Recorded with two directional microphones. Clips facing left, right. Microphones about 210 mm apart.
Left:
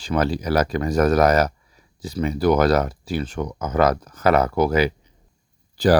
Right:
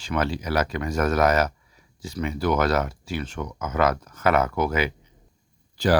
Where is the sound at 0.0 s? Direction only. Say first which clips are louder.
Left 4 dB; 35° left (ahead or behind).